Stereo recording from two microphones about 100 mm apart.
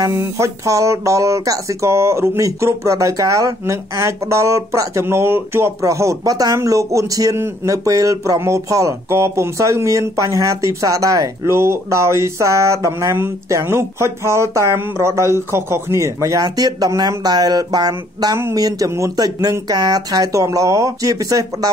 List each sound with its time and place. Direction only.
0.1 s speech: 25° right (ahead or behind)